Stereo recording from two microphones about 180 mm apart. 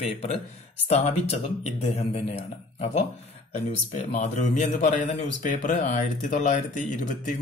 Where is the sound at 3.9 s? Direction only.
40° left (ahead or behind).